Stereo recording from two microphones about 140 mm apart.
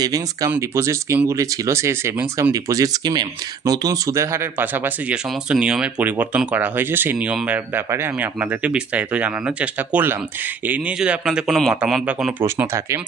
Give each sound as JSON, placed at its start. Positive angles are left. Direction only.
{"t": 0.0, "sound": "speech", "side_deg": -25}
{"t": 12.5, "sound": "speech", "side_deg": -20}